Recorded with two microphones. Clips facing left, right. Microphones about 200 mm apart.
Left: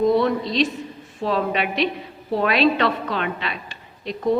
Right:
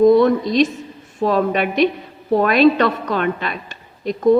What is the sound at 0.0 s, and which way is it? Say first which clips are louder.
A woman's voice: right 7 dB; 45° right (ahead or behind).